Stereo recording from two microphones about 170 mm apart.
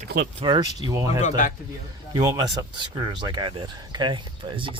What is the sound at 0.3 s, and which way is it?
Speech, 30° right (ahead or behind).